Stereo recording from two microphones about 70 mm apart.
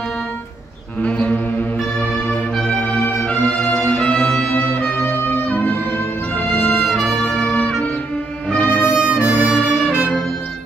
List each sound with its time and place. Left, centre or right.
1.0 s music: centre
2.8 s music: left
6.3 s music: left
7.1 s trumpet: centre
7.4 s music: left
8.6 s brass instrument: left
8.9 s brass instrument: centre
9.5 s music: centre